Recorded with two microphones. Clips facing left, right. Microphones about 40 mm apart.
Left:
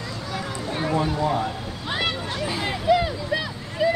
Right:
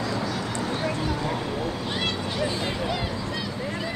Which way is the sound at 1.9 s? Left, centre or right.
Centre.